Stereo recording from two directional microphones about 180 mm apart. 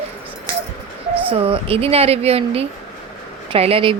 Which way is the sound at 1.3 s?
30° right (ahead or behind).